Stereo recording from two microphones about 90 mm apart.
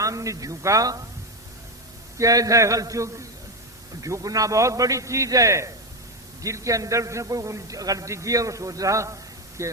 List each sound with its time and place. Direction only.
0.0 s a man's voice: 35° right (ahead or behind)
2.1 s a man's voice: 40° right (ahead or behind)